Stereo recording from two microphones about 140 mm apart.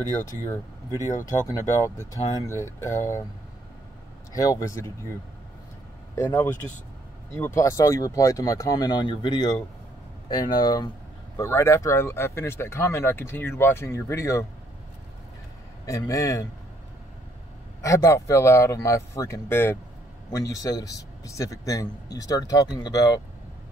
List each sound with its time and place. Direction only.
1.5 s speech: 20° left (ahead or behind)
4.3 s speech: 25° left (ahead or behind)
6.1 s speech: 15° left (ahead or behind)
15.8 s speech: 25° left (ahead or behind)
17.8 s speech: 20° left (ahead or behind)